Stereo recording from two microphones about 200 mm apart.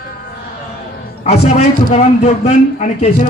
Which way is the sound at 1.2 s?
35° left (ahead or behind).